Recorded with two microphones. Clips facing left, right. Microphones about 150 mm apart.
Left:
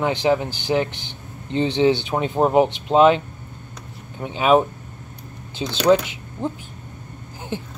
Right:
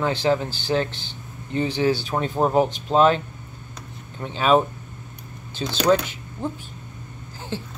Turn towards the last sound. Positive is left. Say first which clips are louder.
# left 2 dB
turn(degrees=15)  # may be behind; listen again after turning